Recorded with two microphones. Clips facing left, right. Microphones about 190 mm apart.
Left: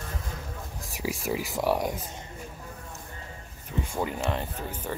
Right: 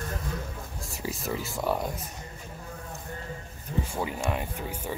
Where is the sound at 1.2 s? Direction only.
15° left (ahead or behind).